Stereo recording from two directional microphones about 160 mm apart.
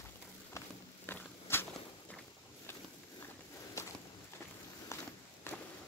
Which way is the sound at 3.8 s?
20° left (ahead or behind).